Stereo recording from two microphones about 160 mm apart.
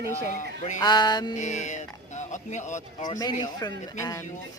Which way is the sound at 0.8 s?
25° left (ahead or behind).